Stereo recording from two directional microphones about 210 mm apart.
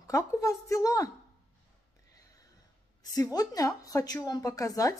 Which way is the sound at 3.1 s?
15° left (ahead or behind).